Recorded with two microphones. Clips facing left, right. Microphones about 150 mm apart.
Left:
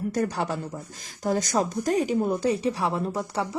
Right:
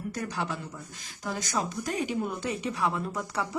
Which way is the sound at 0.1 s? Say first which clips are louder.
Left 6 dB; 45° left (ahead or behind).